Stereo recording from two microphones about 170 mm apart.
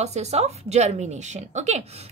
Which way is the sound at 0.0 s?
40° right (ahead or behind).